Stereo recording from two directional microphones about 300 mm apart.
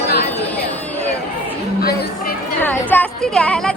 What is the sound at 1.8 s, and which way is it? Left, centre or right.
Chatter, left.